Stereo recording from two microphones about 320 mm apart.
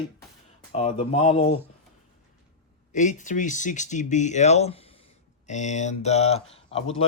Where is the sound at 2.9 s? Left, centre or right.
Left.